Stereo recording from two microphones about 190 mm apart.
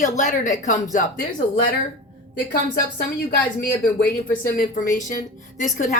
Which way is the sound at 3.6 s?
45° left (ahead or behind).